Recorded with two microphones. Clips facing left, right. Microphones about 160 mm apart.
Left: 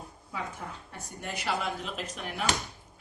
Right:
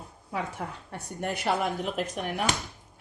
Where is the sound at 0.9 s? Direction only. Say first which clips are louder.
Right 7 dB; 55° right (ahead or behind).